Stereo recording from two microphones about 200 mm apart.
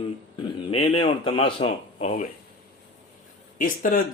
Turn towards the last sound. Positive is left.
turn(degrees=40)  # may be behind; listen again after turning